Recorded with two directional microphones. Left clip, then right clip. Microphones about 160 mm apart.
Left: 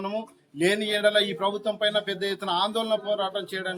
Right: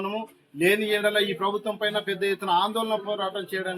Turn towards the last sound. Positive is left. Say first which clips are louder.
# even
turn(degrees=25)  # may be behind; listen again after turning